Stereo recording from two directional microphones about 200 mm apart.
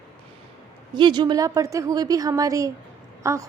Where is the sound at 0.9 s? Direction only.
20° right (ahead or behind).